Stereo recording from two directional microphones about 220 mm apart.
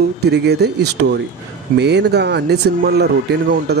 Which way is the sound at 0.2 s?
50° right (ahead or behind).